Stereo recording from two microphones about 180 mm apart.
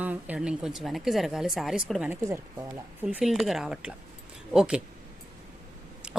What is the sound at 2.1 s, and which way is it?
Speech, 15° right (ahead or behind).